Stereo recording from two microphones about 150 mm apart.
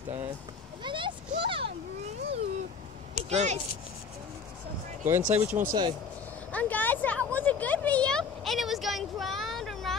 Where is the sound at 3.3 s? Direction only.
50° right (ahead or behind).